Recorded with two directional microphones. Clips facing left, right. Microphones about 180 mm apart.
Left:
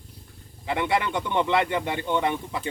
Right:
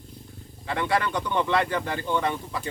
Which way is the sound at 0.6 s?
20° left (ahead or behind).